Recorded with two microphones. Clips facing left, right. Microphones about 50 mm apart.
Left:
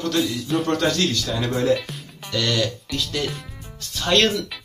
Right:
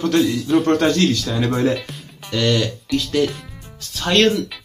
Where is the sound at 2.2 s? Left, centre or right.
Centre.